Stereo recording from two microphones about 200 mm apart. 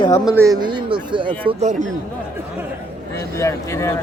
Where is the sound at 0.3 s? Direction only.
15° right (ahead or behind).